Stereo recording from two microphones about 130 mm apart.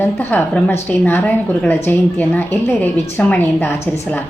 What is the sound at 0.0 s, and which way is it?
A woman's voice, 15° left (ahead or behind).